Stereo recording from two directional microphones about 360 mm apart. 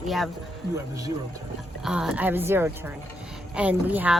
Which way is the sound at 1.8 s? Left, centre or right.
Centre.